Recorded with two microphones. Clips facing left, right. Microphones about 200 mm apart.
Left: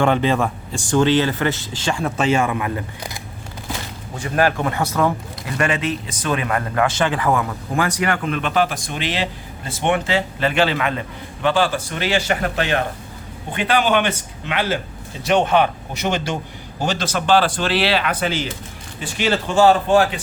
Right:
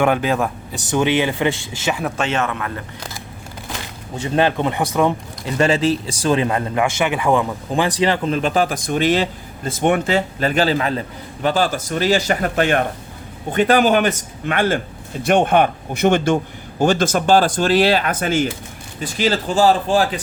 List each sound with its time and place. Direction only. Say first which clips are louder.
0.0 s speech: even; 5° right (ahead or behind)
0.8 s speech: left 1 dB; 15° right (ahead or behind); by 3.1 s 15° left (ahead or behind)
4.2 s speech: right 2 dB; 25° right (ahead or behind)
5.5 s speech: right 5 dB; 30° right (ahead or behind)